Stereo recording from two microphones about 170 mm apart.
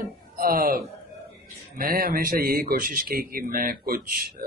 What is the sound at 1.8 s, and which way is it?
Speech, 60° right (ahead or behind).